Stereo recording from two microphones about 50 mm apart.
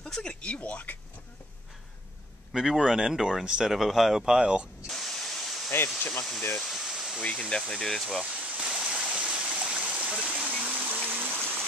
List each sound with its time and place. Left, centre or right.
0.3 s speech: left
2.5 s speech: centre
4.8 s a sound: centre
5.9 s speech: left
6.6 s a sound: centre
7.2 s speech: centre
8.2 s stream: centre; by 11.6 s right